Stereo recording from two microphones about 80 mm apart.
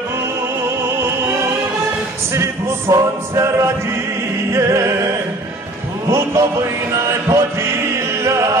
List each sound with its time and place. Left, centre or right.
0.7 s opera: right
2.3 s music: right
6.0 s a man's voice: right
7.3 s music: right